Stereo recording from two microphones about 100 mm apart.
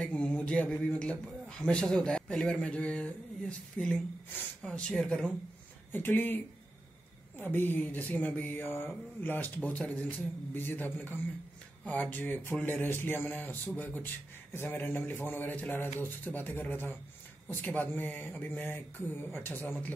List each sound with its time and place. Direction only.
0.0 s a man's voice: 10° left (ahead or behind)
5.9 s speech: 20° left (ahead or behind)